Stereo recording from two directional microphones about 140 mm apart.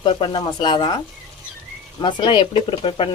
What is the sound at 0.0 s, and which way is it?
Speech, 35° left (ahead or behind).